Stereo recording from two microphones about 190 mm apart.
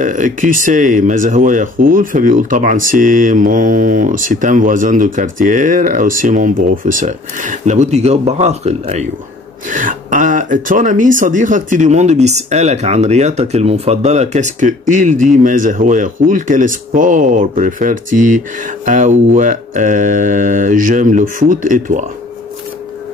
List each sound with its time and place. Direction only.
0.0 s speech: 45° right (ahead or behind)